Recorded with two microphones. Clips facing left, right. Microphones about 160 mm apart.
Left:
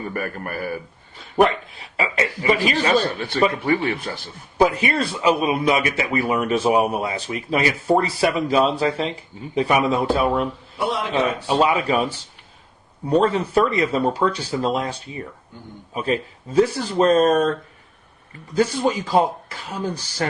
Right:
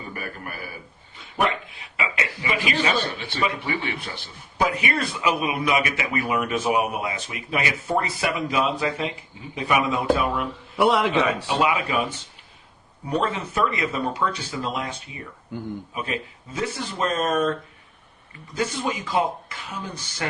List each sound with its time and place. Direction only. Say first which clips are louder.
0.1 s a man's voice: left 7 dB; 50° left (ahead or behind)
2.0 s speech: left 5 dB; 35° left (ahead or behind)
4.5 s speech: left 5 dB; 30° left (ahead or behind)
10.8 s a man's voice: right 5 dB; 70° right (ahead or behind)
11.4 s speech: left 4 dB; 35° left (ahead or behind)
13.1 s speech: left 7 dB; 35° left (ahead or behind)
18.5 s speech: left 7 dB; 35° left (ahead or behind)